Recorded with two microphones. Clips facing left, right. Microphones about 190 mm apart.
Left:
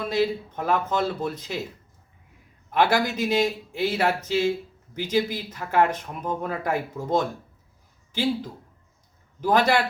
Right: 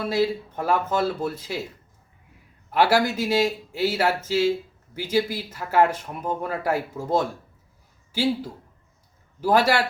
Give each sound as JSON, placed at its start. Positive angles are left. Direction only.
{"t": 0.0, "sound": "speech", "side_deg": -5}
{"t": 2.7, "sound": "a man's voice", "side_deg": -5}
{"t": 9.4, "sound": "speech", "side_deg": -5}